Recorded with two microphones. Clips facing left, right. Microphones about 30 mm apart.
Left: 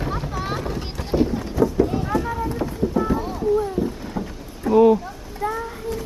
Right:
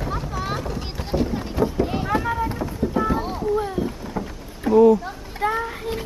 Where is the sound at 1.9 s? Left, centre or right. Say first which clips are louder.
Right 1 dB; right.